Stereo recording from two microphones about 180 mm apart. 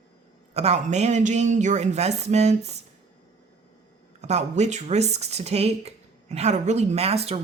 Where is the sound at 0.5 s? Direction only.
35° right (ahead or behind).